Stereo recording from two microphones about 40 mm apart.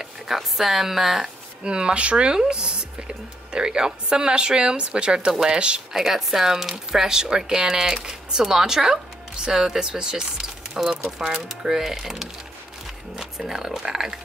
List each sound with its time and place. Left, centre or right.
0.0 s speech: centre
1.6 s speech: right
5.9 s speech: centre